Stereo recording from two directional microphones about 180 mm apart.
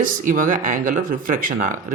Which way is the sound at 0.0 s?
50° right (ahead or behind).